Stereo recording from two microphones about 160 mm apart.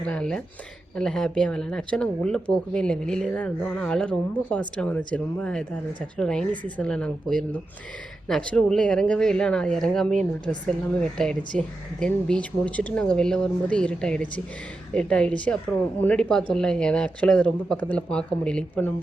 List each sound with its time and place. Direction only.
0.0 s speech: 5° left (ahead or behind)